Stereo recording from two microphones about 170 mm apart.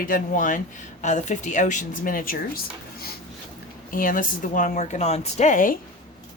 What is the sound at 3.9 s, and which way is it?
Speech, 55° left (ahead or behind).